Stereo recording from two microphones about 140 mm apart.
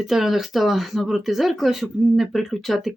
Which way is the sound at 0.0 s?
Centre (ahead or behind).